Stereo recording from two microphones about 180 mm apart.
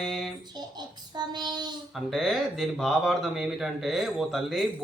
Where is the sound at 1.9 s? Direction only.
Centre (ahead or behind).